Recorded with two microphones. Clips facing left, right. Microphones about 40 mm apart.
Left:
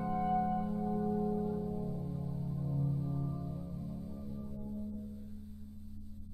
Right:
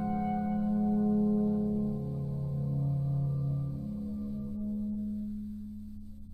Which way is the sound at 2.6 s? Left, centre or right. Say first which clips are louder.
Right 2 dB; centre.